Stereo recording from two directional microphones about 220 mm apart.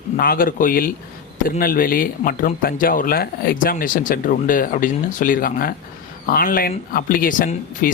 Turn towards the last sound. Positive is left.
turn(degrees=40)  # may be behind; listen again after turning